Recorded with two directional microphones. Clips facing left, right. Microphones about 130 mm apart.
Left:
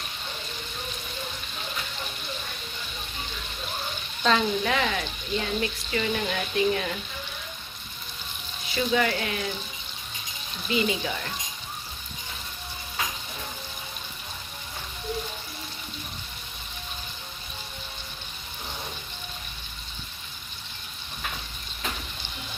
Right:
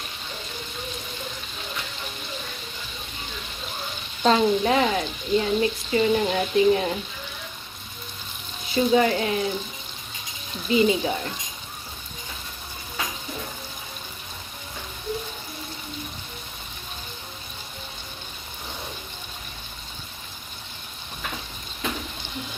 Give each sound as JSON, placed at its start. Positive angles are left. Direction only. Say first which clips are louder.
{"t": 4.2, "sound": "speech", "louder": "right 5 dB", "side_deg": -35}
{"t": 8.7, "sound": "speech", "louder": "right 5 dB", "side_deg": -30}
{"t": 10.7, "sound": "speech", "louder": "right 6 dB", "side_deg": -30}